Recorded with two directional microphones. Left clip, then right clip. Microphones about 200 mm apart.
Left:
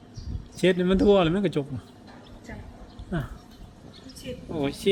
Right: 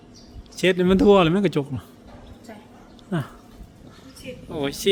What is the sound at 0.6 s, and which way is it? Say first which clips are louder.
Speech: right 3 dB; 25° right (ahead or behind).